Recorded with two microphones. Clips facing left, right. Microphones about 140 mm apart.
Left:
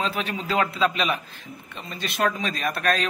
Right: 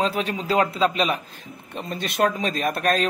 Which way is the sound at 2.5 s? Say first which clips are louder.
Right 2 dB; 45° right (ahead or behind).